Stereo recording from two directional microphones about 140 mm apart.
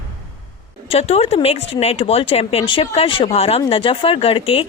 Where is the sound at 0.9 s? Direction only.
45° left (ahead or behind).